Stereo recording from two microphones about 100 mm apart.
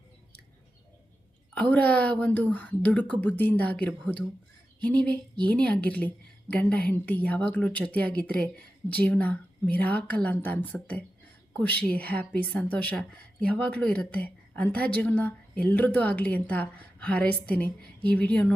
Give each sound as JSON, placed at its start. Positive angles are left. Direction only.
{"t": 1.5, "sound": "a woman's voice", "side_deg": 15}